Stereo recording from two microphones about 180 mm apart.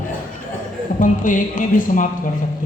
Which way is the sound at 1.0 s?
45° left (ahead or behind).